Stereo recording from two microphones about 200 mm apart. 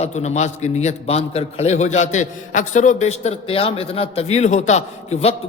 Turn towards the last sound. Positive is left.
turn(degrees=30)  # may be behind; listen again after turning